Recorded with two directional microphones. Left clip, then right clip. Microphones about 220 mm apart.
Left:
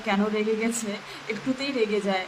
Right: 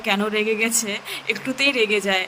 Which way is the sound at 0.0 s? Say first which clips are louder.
Right 4 dB; 50° right (ahead or behind).